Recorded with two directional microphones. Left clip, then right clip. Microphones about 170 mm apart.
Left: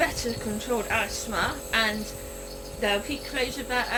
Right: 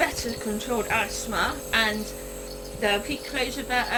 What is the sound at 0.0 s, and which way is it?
Speech, 25° right (ahead or behind).